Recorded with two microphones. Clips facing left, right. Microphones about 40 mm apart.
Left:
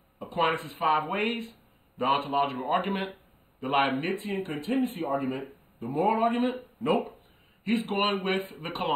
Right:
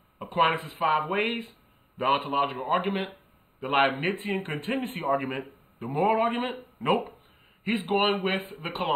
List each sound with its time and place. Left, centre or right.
0.5 s a man's voice: centre
3.7 s a man's voice: centre
4.1 s speech: right
7.6 s speech: centre